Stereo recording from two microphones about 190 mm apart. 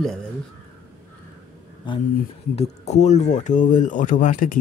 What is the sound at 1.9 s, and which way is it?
Speech, 25° left (ahead or behind).